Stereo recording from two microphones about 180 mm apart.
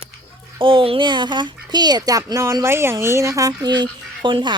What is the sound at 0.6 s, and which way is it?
Speech, 30° right (ahead or behind).